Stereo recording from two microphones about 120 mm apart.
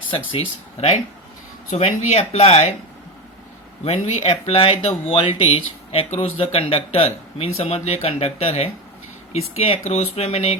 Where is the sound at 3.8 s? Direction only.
55° left (ahead or behind).